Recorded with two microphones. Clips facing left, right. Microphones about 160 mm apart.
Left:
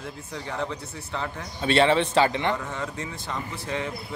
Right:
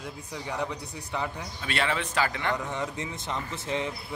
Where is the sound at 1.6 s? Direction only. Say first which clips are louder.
Left 10 dB; 30° left (ahead or behind).